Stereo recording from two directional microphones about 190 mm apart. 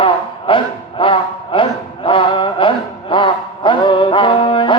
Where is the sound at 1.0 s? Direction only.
25° left (ahead or behind).